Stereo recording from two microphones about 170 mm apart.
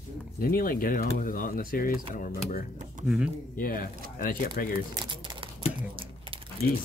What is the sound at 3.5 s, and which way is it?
Speech, 55° left (ahead or behind).